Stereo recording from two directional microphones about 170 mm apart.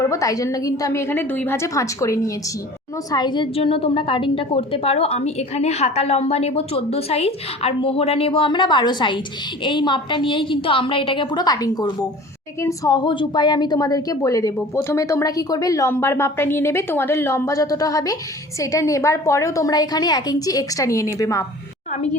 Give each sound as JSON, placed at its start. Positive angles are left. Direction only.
{"t": 0.0, "sound": "a woman's voice", "side_deg": 20}